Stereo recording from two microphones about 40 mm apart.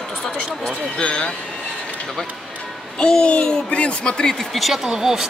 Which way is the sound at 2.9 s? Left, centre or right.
Centre.